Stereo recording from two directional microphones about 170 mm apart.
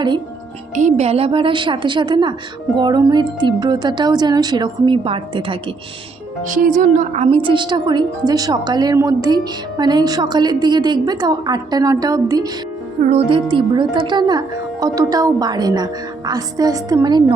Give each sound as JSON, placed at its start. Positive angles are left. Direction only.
{"t": 0.8, "sound": "speech", "side_deg": -45}
{"t": 6.4, "sound": "speech", "side_deg": -50}
{"t": 13.1, "sound": "speech", "side_deg": -35}